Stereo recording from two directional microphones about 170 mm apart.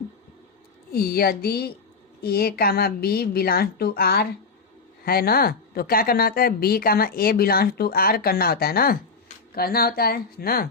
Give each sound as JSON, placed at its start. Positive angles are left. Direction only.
{"t": 0.9, "sound": "speech", "side_deg": 65}